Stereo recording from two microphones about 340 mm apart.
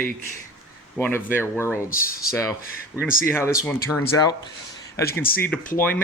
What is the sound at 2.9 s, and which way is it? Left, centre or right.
Speech, centre.